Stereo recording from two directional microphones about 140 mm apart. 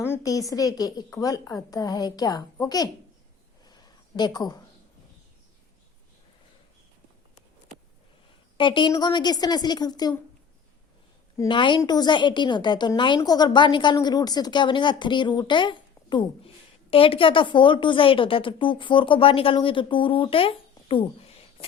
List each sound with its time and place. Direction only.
0.0 s a woman's voice: 20° left (ahead or behind)
4.2 s a woman's voice: 30° left (ahead or behind)
8.5 s a woman's voice: 35° left (ahead or behind)
11.4 s a woman's voice: 35° left (ahead or behind)